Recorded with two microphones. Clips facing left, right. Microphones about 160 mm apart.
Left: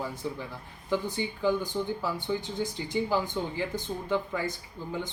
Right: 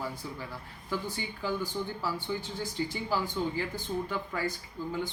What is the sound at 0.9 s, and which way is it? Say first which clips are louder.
Speech: left 5 dB; 20° left (ahead or behind).